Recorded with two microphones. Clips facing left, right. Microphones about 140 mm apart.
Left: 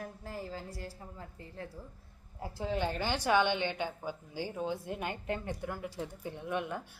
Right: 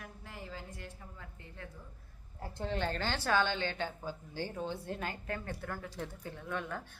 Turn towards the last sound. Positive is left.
turn(degrees=15)  # may be behind; listen again after turning